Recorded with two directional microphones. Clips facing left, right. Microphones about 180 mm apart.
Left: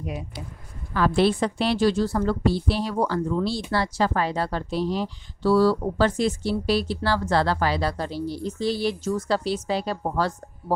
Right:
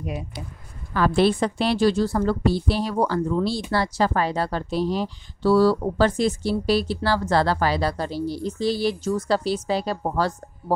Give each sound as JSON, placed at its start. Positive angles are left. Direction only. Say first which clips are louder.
{"t": 0.9, "sound": "a woman's voice", "louder": "right 1 dB", "side_deg": -50}